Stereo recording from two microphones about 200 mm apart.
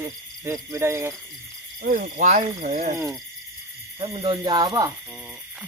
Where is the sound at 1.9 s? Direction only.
40° right (ahead or behind).